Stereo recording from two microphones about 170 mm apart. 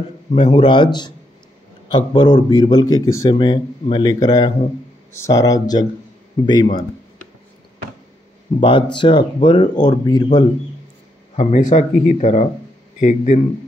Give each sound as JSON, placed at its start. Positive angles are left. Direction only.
{"t": 0.4, "sound": "speech", "side_deg": 25}
{"t": 8.5, "sound": "speech", "side_deg": 30}
{"t": 11.3, "sound": "speech", "side_deg": 45}